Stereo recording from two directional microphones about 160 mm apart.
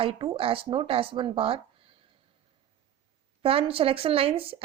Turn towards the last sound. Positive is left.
turn(degrees=-35)  # may be behind; listen again after turning